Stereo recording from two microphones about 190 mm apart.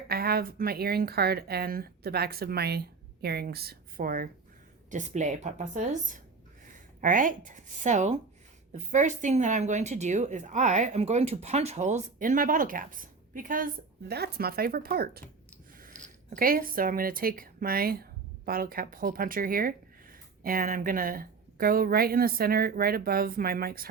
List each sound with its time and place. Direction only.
0.1 s speech: 55° right (ahead or behind)
14.1 s speech: 55° right (ahead or behind)